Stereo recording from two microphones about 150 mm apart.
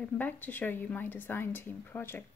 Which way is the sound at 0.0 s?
10° left (ahead or behind).